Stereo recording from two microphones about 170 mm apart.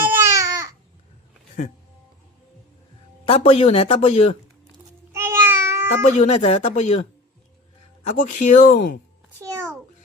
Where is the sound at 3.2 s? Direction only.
35° left (ahead or behind).